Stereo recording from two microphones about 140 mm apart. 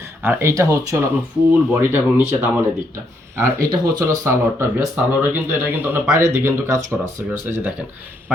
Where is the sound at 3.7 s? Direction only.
25° right (ahead or behind).